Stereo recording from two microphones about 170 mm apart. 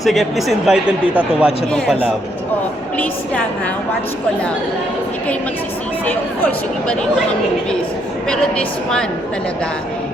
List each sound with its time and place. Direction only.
0.0 s speech: centre (ahead or behind)
6.1 s speech: 10° left (ahead or behind)
8.3 s speech: 5° left (ahead or behind)